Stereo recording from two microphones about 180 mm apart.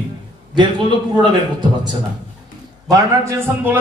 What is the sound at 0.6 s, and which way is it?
Speech, 25° right (ahead or behind).